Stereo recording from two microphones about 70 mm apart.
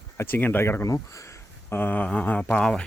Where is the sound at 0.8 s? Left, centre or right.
Left.